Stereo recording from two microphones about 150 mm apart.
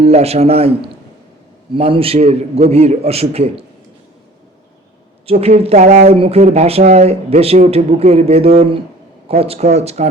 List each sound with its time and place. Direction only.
0.0 s speech: 45° right (ahead or behind)
1.7 s speech: 35° right (ahead or behind)
5.2 s speech: 40° right (ahead or behind)